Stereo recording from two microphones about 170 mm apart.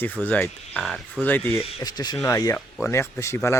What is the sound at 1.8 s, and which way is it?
Speech, 25° left (ahead or behind).